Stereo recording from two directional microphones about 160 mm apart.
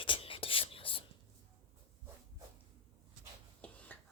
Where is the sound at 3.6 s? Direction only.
10° left (ahead or behind).